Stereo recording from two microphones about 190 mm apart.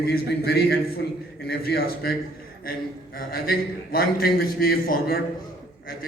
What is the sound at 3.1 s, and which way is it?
A man's voice, 50° left (ahead or behind).